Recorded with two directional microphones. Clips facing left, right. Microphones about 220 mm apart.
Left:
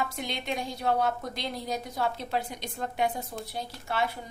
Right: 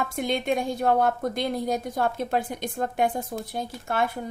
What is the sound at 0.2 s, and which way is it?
A woman's voice, 50° right (ahead or behind).